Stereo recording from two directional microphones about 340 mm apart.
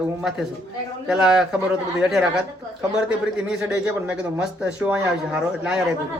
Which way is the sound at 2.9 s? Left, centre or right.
Centre.